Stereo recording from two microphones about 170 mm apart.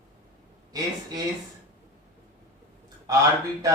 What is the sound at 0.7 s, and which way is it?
Mantra, 20° right (ahead or behind).